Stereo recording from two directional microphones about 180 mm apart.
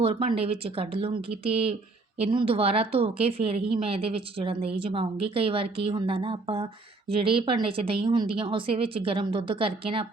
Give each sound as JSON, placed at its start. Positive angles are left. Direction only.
{"t": 0.0, "sound": "a woman's voice", "side_deg": -30}